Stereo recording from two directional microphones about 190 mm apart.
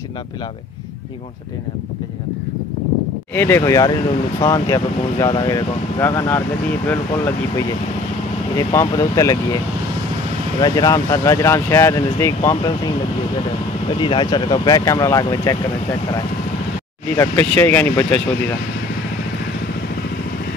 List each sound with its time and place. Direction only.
3.3 s speech: 10° left (ahead or behind)
10.6 s speech: 20° left (ahead or behind)
13.9 s speech: 25° left (ahead or behind)
17.2 s speech: 10° left (ahead or behind)